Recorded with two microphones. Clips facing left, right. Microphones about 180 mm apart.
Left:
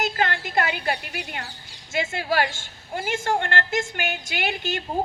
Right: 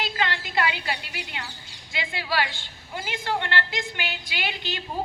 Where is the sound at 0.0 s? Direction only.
50° left (ahead or behind).